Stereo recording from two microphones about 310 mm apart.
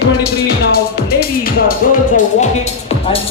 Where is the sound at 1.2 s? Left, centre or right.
Left.